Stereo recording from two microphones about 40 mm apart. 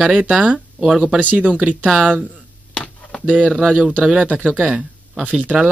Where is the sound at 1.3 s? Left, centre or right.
Right.